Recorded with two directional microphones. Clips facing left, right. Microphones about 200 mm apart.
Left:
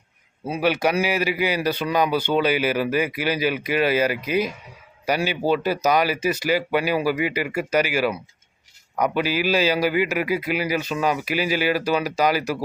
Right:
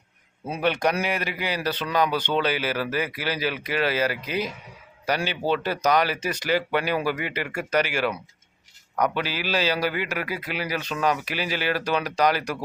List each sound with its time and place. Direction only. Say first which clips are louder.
0.4 s a man's voice: left 2 dB; 5° left (ahead or behind)